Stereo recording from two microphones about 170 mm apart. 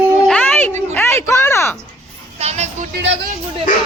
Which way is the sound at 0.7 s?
40° right (ahead or behind).